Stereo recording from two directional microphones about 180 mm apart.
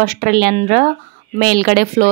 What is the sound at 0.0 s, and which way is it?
A woman's voice, 55° right (ahead or behind).